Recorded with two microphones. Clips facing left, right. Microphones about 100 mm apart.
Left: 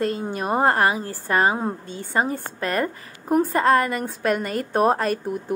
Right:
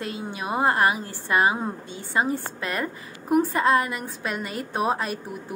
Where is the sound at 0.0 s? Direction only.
45° left (ahead or behind).